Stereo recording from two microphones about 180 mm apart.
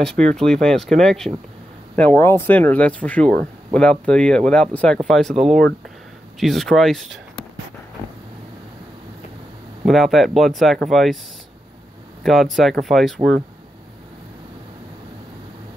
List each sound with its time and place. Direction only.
0.0 s speech: 5° left (ahead or behind)
9.8 s speech: centre (ahead or behind)
12.2 s speech: centre (ahead or behind)